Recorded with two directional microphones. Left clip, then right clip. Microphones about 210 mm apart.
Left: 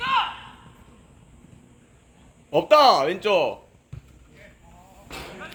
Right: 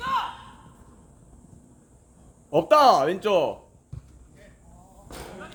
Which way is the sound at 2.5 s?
55° right (ahead or behind).